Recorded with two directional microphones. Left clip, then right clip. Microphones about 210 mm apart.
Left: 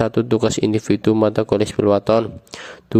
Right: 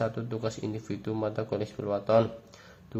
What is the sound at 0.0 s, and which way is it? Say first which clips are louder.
Speech: left 14 dB; 50° left (ahead or behind).